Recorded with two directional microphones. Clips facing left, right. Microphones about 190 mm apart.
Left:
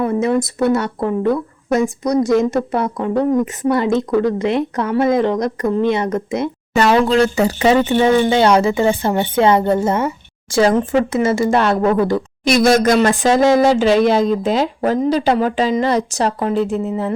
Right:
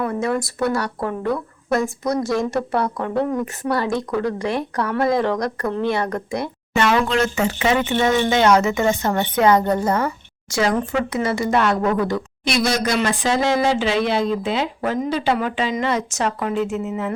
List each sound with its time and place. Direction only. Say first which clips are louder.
0.0 s speech: left 5 dB; 20° left (ahead or behind)
6.7 s speech: left 5 dB; 35° left (ahead or behind)
12.5 s speech: left 8 dB; 50° left (ahead or behind)